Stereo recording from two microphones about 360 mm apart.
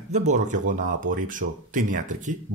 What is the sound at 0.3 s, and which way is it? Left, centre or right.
Speech, centre.